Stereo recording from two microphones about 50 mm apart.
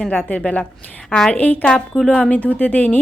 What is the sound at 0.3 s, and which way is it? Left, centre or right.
A woman's voice, left.